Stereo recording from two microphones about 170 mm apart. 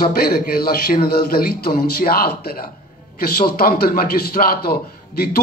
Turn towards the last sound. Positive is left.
turn(degrees=65)  # may be behind; listen again after turning